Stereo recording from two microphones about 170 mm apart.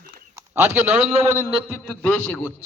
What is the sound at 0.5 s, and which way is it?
Speech, 15° right (ahead or behind).